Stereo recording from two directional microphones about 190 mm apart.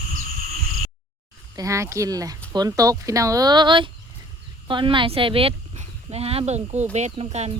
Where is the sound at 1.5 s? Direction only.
15° right (ahead or behind).